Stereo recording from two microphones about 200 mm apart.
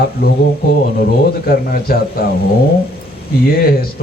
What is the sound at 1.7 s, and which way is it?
Speech, 50° left (ahead or behind).